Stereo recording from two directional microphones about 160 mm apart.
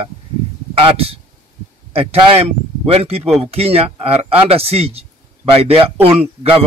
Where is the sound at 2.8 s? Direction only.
40° right (ahead or behind).